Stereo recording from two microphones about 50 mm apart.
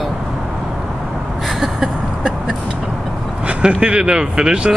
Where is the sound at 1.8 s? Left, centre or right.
Centre.